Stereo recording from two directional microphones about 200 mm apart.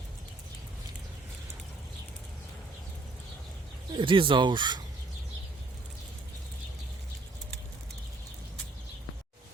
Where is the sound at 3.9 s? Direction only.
25° right (ahead or behind).